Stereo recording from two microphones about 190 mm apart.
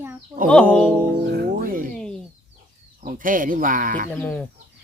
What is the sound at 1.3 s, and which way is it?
Speech, 55° right (ahead or behind).